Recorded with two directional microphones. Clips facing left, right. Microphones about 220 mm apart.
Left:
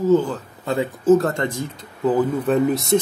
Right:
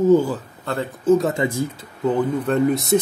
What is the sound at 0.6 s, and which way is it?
Speech, 10° left (ahead or behind).